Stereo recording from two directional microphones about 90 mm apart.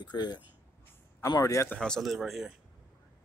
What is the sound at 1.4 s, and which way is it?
Speech, 40° left (ahead or behind).